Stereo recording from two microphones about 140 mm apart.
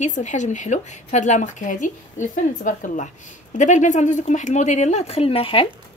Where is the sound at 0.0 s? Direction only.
60° left (ahead or behind); by 5.7 s 40° left (ahead or behind).